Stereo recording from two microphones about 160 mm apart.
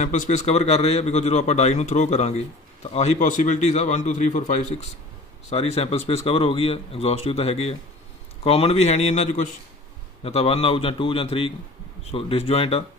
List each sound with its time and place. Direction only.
0.0 s a man's voice: 50° left (ahead or behind)